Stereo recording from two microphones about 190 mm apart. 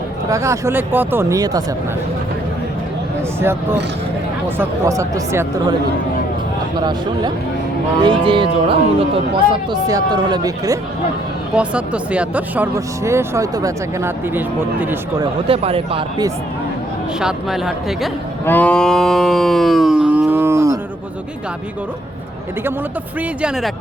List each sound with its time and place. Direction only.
0.3 s speech: 15° right (ahead or behind)
3.4 s speech: 10° right (ahead or behind)
6.7 s speech: 20° right (ahead or behind)
11.5 s speech: 5° right (ahead or behind)
15.2 s speech: 30° right (ahead or behind)
17.2 s speech: 5° right (ahead or behind)
18.4 s livestock: 10° left (ahead or behind); by 20.7 s 15° right (ahead or behind)
23.4 s speech: centre (ahead or behind)